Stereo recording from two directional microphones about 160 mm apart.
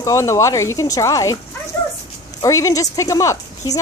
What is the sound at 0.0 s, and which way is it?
A woman's voice, 20° left (ahead or behind).